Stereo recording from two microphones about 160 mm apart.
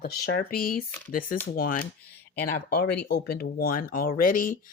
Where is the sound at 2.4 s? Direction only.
80° left.